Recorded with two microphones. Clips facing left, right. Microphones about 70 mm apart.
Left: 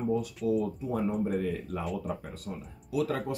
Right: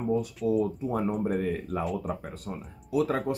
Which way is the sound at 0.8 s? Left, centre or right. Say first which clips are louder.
Right 2 dB; right.